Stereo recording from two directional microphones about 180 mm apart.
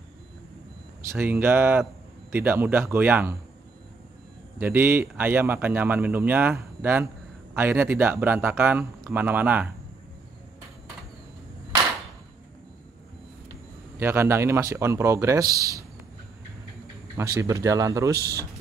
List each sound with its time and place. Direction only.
1.1 s speech: 10° right (ahead or behind)
4.6 s speech: 10° right (ahead or behind)
13.9 s speech: 15° right (ahead or behind)
17.2 s speech: 20° right (ahead or behind)